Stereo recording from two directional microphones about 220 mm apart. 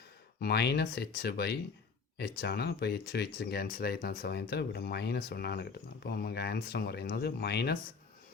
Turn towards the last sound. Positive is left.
turn(degrees=50)  # may be behind; listen again after turning